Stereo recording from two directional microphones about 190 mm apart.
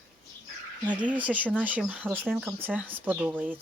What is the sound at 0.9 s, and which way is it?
Speech, 10° right (ahead or behind).